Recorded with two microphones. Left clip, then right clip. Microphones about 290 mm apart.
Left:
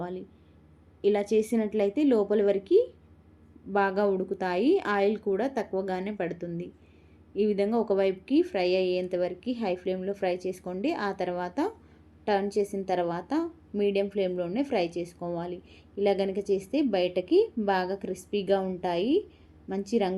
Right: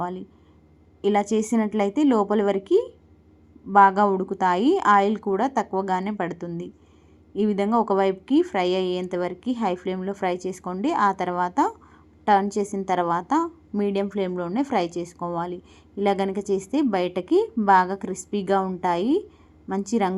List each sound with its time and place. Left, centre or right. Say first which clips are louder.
1.0 s a woman's voice: right 3 dB; centre